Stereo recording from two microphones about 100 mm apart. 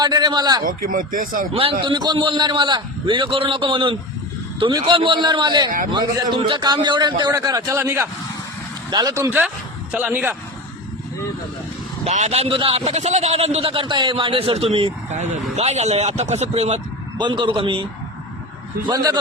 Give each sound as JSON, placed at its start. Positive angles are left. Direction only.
{"t": 0.0, "sound": "a man's voice", "side_deg": -45}
{"t": 1.5, "sound": "a man's voice", "side_deg": -60}
{"t": 7.3, "sound": "a man's voice", "side_deg": -35}
{"t": 7.8, "sound": "speech", "side_deg": -25}
{"t": 8.9, "sound": "speech", "side_deg": -45}
{"t": 9.9, "sound": "speech", "side_deg": -15}
{"t": 12.0, "sound": "a man's voice", "side_deg": -85}
{"t": 15.5, "sound": "speech", "side_deg": -90}
{"t": 17.2, "sound": "a man's voice", "side_deg": -55}
{"t": 18.9, "sound": "a man's voice", "side_deg": -40}